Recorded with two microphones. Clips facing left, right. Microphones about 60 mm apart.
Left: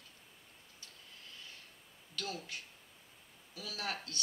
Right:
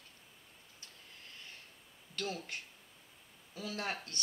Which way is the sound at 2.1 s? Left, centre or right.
Right.